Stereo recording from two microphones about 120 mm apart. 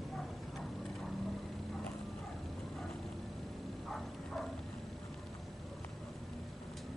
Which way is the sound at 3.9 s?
5° left (ahead or behind).